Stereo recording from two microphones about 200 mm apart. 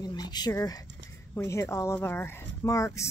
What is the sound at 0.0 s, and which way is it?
A woman's voice, 20° left (ahead or behind).